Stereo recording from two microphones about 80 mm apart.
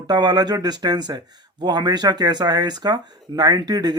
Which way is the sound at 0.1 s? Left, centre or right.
Right.